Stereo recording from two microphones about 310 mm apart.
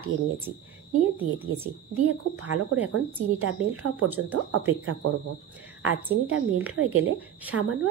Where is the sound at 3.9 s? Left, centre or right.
Centre.